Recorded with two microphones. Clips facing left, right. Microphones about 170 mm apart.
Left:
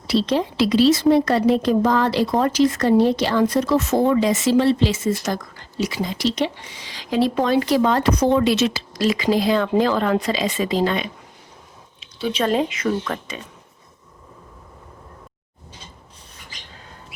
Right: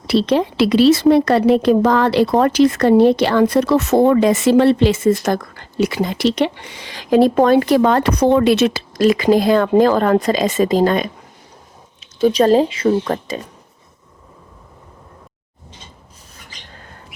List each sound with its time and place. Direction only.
0.1 s speech: 65° right (ahead or behind); by 13.4 s 35° right (ahead or behind)